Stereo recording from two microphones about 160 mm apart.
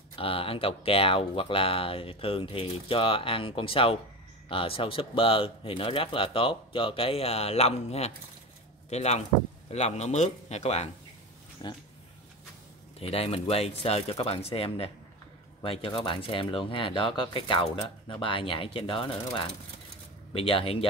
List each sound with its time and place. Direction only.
0.1 s speech: 35° left (ahead or behind)
11.6 s speech: 25° left (ahead or behind)
13.0 s speech: 40° left (ahead or behind)